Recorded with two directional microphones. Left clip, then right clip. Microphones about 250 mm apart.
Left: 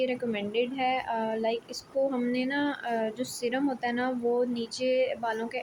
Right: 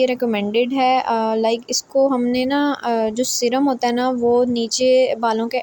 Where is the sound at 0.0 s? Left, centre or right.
Right.